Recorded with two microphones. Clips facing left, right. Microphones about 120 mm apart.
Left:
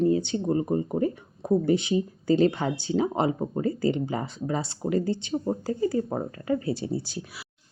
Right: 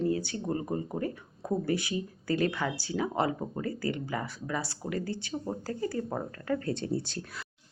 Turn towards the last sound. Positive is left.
turn(degrees=5)  # may be behind; listen again after turning